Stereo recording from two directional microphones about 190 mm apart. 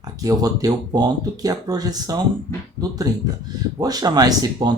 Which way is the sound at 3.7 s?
20° right (ahead or behind).